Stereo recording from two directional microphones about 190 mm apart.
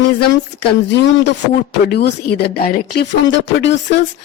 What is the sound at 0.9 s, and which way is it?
A woman's voice, 70° left (ahead or behind).